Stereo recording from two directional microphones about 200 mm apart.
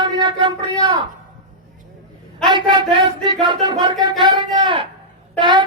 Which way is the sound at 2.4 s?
25° right (ahead or behind).